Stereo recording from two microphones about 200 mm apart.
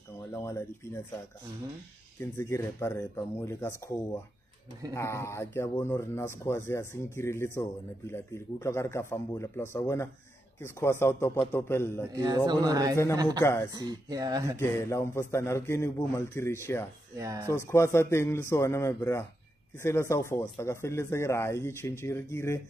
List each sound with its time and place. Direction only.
0.3 s speech: 15° left (ahead or behind)
2.1 s speech: 10° left (ahead or behind)
12.4 s speech: 20° right (ahead or behind)
13.4 s speech: 15° left (ahead or behind)
13.7 s speech: 20° right (ahead or behind)
14.6 s speech: 15° left (ahead or behind)
17.2 s speech: 15° right (ahead or behind)
17.5 s speech: 15° left (ahead or behind)